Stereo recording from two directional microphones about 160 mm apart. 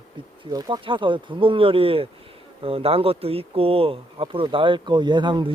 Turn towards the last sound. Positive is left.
turn(degrees=-30)  # may be behind; listen again after turning